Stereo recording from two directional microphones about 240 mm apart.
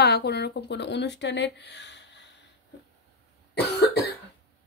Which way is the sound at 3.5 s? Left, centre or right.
Left.